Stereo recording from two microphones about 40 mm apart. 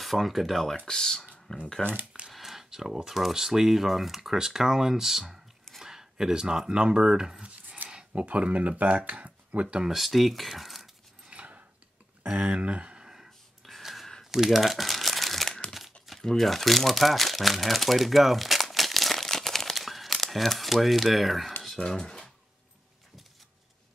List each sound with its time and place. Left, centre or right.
0.0 s speech: centre
0.8 s speech: centre
2.3 s a sound: centre
3.3 s speech: centre
7.4 s chopping: right
8.1 s speech: right
9.8 s speech: centre
11.2 s a sound: right
12.3 s speech: right; by 13.3 s centre
13.6 s a sound: centre
14.3 s crumpling: centre
16.2 s speech: centre
21.7 s speech: centre